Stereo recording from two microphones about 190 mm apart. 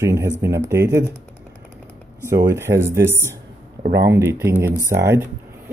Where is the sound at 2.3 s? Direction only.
15° right (ahead or behind).